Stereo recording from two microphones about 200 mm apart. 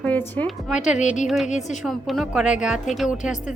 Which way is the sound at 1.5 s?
35° left (ahead or behind).